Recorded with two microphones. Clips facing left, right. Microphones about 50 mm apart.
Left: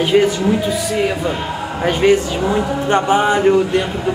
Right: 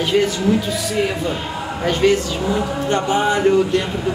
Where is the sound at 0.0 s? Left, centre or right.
Centre.